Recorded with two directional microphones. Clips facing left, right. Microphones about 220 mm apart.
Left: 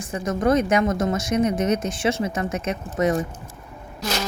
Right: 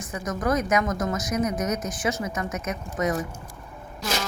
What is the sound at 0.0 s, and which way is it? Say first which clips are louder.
A woman's voice: left 5 dB; 30° left (ahead or behind).